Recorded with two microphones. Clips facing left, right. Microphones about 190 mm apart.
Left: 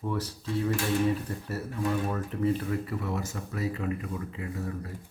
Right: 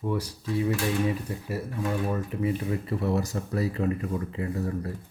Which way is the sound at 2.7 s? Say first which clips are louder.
Right 4 dB; 25° right (ahead or behind).